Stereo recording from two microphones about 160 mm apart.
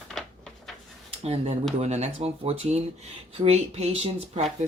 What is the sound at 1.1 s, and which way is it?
Speech, 40° right (ahead or behind).